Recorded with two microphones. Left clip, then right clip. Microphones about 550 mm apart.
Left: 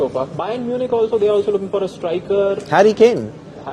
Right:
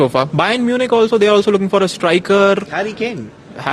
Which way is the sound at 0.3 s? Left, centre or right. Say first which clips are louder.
Right 6 dB; right.